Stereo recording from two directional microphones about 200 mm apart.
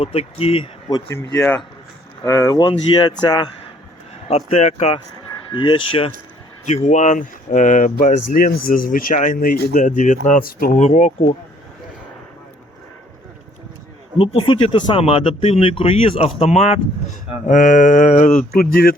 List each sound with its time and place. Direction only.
0.0 s speech: 30° left (ahead or behind)
4.3 s speech: 30° left (ahead or behind)
5.5 s speech: 25° left (ahead or behind)
14.4 s speech: 25° left (ahead or behind); by 18.9 s 50° left (ahead or behind)